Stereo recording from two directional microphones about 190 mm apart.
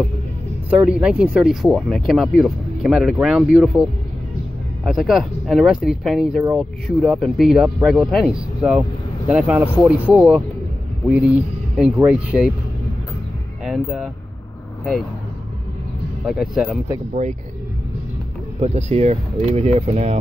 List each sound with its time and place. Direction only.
0.7 s speech: 5° right (ahead or behind)
4.8 s speech: centre (ahead or behind)
13.7 s speech: centre (ahead or behind)
16.3 s speech: centre (ahead or behind)
17.1 s speech: 40° right (ahead or behind)
18.6 s speech: 35° right (ahead or behind)